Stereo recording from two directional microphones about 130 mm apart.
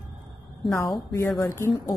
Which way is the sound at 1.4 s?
20° left (ahead or behind).